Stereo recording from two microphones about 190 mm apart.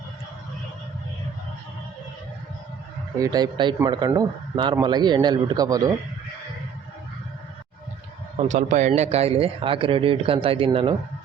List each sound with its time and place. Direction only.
3.2 s speech: 20° right (ahead or behind)
8.4 s speech: 40° right (ahead or behind)